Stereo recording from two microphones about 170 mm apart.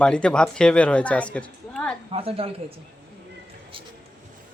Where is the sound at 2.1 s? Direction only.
35° right (ahead or behind).